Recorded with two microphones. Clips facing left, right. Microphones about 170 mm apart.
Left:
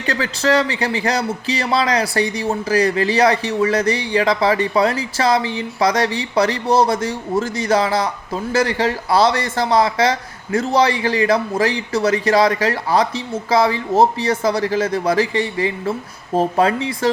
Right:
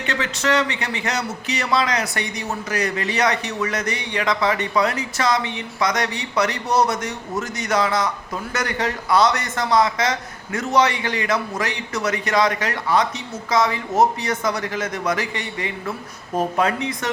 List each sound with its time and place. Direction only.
0.0 s a man's voice: 35° left (ahead or behind)